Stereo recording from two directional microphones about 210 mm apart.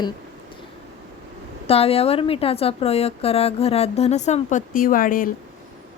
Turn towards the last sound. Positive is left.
turn(degrees=40)  # may be behind; listen again after turning